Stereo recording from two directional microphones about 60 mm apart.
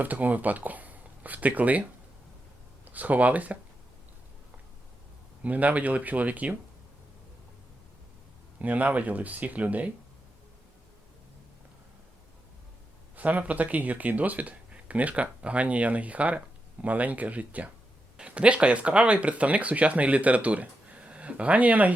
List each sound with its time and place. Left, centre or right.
0.0 s speech: right
2.9 s speech: right
5.4 s speech: right
8.6 s speech: right
13.1 s speech: right